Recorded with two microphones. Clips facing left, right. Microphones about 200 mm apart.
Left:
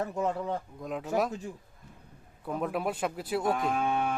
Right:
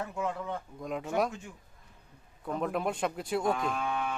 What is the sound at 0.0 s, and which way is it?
Speech, 40° left (ahead or behind).